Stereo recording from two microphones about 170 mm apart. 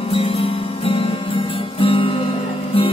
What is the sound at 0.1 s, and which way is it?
Music, 35° left (ahead or behind).